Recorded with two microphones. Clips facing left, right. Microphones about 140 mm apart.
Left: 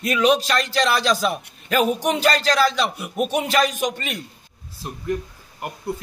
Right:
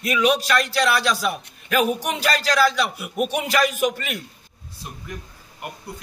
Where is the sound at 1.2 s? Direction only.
35° left (ahead or behind).